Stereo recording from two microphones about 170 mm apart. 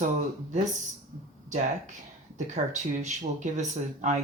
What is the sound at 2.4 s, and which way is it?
Speech, 45° right (ahead or behind).